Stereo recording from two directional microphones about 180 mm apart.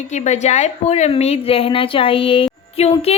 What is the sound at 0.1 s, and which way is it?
A woman's voice, 40° left (ahead or behind).